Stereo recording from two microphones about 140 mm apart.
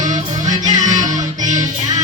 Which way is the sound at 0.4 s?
25° right (ahead or behind).